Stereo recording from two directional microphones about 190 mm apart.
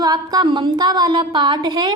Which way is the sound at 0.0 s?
20° right (ahead or behind).